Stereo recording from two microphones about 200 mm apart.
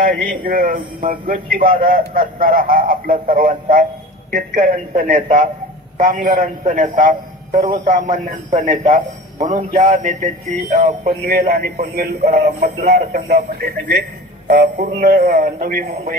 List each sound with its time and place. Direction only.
0.0 s a man's voice: 45° right (ahead or behind)